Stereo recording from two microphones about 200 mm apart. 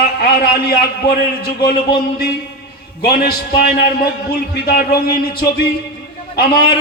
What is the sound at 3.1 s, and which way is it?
A man's voice, 50° left (ahead or behind).